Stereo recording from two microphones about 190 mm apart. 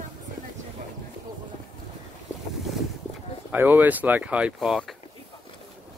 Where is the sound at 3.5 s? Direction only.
10° right (ahead or behind).